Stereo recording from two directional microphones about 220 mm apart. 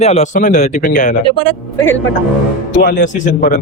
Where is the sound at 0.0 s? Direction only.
30° left (ahead or behind).